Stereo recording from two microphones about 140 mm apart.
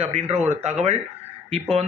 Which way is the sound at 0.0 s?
50° right (ahead or behind).